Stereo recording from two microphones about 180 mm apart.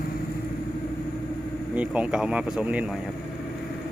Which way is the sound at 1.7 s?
5° right (ahead or behind).